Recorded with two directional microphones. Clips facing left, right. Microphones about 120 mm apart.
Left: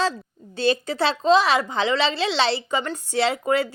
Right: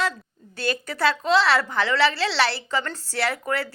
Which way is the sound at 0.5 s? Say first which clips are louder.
Left 6 dB; 25° left (ahead or behind).